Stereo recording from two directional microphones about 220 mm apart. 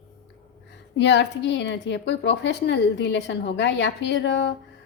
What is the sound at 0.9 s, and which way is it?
A woman's voice, 50° left (ahead or behind).